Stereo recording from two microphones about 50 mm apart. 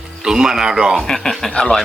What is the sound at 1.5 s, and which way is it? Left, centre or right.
Speech, centre.